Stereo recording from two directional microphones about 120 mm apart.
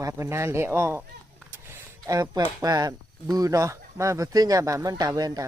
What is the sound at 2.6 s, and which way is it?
Speech, 30° right (ahead or behind).